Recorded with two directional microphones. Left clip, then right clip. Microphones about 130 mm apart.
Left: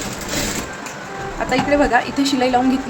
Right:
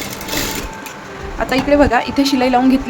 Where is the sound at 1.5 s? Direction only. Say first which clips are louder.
Right 3 dB; 50° right (ahead or behind).